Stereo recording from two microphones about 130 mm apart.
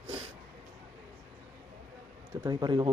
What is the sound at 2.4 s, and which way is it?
Speech, 35° right (ahead or behind).